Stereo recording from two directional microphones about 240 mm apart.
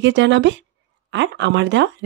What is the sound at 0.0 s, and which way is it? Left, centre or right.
A woman's voice, right.